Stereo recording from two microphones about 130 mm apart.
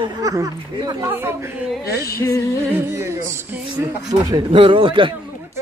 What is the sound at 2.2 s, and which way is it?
Speech, 25° left (ahead or behind).